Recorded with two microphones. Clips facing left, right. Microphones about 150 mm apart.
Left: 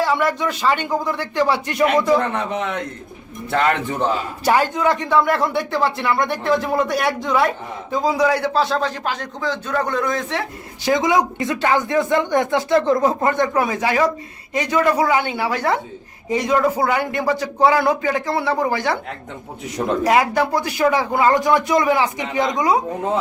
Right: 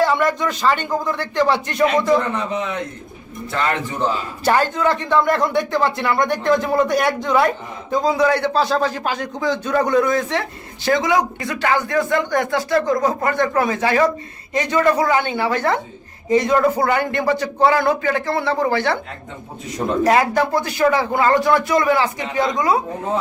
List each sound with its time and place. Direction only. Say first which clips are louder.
0.0 s speech: right 2 dB; 5° left (ahead or behind)
2.5 s a man's voice: even; 65° left (ahead or behind)
4.4 s speech: even; 10° left (ahead or behind)
10.8 s speech: even; 20° left (ahead or behind)
20.1 s speech: right 1 dB; 10° left (ahead or behind)